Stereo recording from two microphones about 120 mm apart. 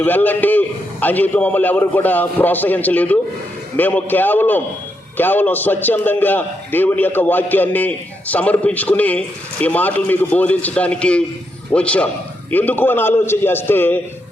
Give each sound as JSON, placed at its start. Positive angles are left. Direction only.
{"t": 0.0, "sound": "a man's voice", "side_deg": 15}